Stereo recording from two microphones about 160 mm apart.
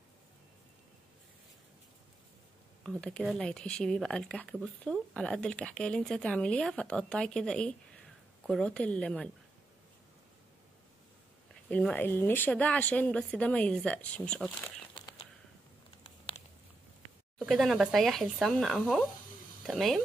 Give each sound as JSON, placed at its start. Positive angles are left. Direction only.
{"t": 2.8, "sound": "speech", "side_deg": 5}
{"t": 11.7, "sound": "speech", "side_deg": 10}
{"t": 16.0, "sound": "a sound", "side_deg": 35}
{"t": 17.4, "sound": "speech", "side_deg": 0}